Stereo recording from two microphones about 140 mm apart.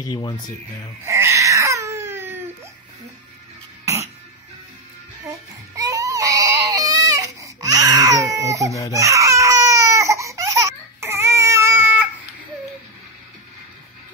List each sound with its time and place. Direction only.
0.0 s speech: 30° left (ahead or behind)
1.0 s babbling: 20° right (ahead or behind)
3.8 s cough: 20° right (ahead or behind)
5.2 s baby cry: 25° right (ahead or behind)